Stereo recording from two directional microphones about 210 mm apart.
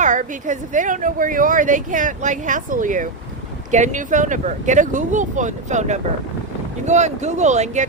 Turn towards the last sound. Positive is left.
turn(degrees=-35)  # may be behind; listen again after turning